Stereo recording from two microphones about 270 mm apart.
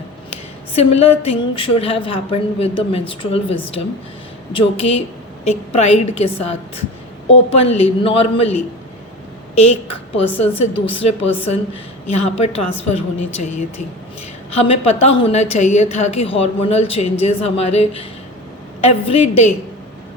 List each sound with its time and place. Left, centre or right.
0.7 s a woman's voice: left
9.6 s a woman's voice: left